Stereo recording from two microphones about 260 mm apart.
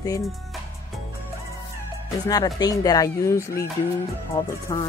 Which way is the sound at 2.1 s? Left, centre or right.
Centre.